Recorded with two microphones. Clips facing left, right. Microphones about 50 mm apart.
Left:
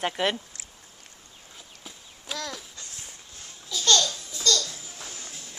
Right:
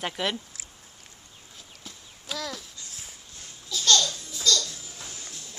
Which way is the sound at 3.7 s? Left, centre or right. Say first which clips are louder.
Even; centre.